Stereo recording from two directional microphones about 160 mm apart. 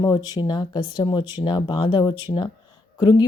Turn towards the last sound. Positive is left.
turn(degrees=25)  # may be behind; listen again after turning